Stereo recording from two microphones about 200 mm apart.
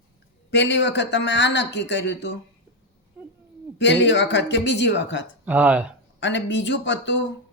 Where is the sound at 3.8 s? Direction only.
60° left (ahead or behind).